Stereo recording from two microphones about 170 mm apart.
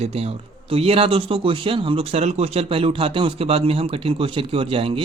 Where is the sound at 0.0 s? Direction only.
35° right (ahead or behind).